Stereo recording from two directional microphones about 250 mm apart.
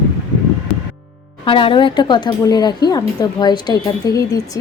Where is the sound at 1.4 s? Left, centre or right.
Left.